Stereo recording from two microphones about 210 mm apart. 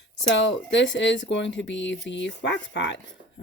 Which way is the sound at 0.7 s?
60° left (ahead or behind).